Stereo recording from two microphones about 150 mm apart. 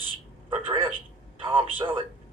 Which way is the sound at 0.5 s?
35° right (ahead or behind).